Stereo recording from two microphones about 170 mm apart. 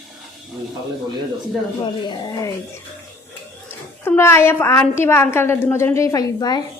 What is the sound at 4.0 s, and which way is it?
A woman's voice, 15° left (ahead or behind).